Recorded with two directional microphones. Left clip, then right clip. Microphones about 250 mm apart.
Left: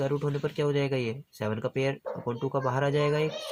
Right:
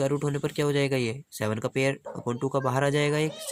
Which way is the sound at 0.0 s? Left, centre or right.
Right.